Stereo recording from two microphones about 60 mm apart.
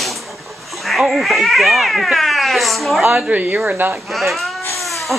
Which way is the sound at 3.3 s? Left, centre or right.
Right.